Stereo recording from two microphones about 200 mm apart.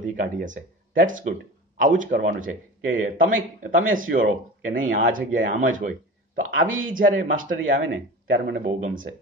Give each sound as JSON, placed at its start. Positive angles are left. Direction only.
{"t": 0.0, "sound": "a man's voice", "side_deg": -40}